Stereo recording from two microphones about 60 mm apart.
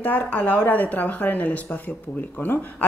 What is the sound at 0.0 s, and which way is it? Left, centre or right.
Speech, left.